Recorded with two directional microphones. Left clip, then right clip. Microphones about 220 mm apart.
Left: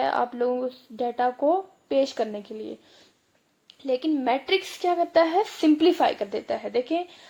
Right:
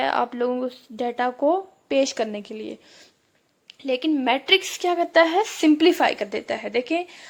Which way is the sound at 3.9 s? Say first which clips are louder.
Right 2 dB; 25° right (ahead or behind).